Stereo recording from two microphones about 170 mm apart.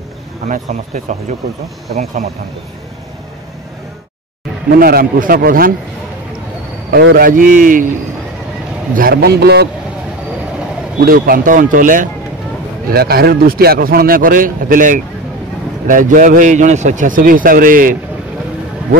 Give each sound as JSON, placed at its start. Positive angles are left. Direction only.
{"t": 0.5, "sound": "a man's voice", "side_deg": -50}
{"t": 4.7, "sound": "a man's voice", "side_deg": -60}
{"t": 6.9, "sound": "a man's voice", "side_deg": -70}
{"t": 8.9, "sound": "a man's voice", "side_deg": -60}
{"t": 11.1, "sound": "a man's voice", "side_deg": -60}
{"t": 12.9, "sound": "a man's voice", "side_deg": -65}